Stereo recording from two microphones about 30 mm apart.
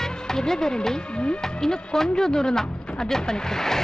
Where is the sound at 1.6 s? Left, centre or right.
Centre.